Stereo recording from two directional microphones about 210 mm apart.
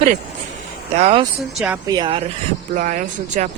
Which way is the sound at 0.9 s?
30° right (ahead or behind).